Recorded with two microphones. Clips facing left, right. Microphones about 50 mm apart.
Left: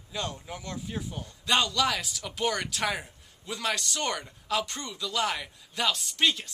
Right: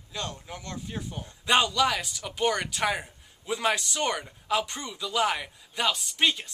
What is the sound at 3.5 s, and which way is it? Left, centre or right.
Speech, centre.